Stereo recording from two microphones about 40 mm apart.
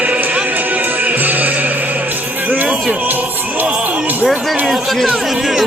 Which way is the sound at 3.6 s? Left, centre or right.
Right.